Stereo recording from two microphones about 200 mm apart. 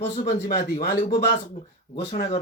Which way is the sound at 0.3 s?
50° left (ahead or behind).